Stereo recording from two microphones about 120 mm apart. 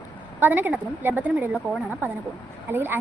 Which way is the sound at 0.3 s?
15° right (ahead or behind).